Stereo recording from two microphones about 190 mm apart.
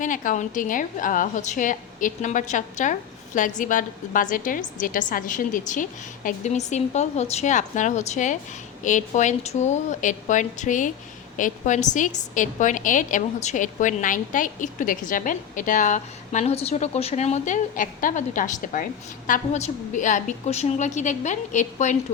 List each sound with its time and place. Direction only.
0.0 s a woman's voice: 45° left (ahead or behind)